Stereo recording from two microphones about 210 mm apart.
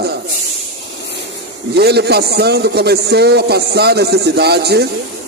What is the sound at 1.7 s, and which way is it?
A man's voice, 50° right (ahead or behind).